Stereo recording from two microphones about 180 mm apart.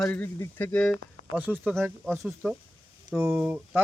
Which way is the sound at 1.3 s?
10° right (ahead or behind).